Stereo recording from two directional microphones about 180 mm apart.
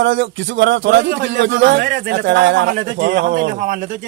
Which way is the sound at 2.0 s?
80° right.